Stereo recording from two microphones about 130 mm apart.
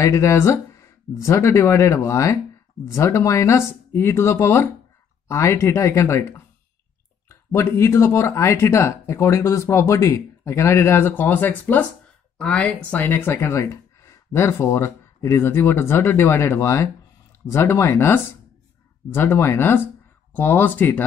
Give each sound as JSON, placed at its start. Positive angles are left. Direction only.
{"t": 0.0, "sound": "speech", "side_deg": 20}